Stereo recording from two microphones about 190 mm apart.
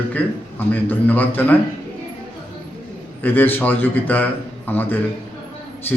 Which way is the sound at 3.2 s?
10° left (ahead or behind).